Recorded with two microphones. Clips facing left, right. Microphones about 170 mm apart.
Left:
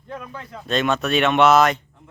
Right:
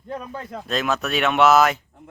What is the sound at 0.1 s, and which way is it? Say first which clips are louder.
Speech: right 3 dB; 40° right (ahead or behind).